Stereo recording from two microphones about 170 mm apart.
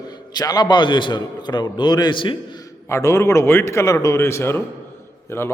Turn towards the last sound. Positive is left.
turn(degrees=15)  # may be behind; listen again after turning